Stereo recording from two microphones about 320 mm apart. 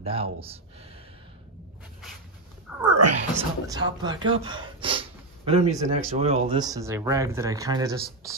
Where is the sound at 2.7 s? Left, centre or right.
Centre.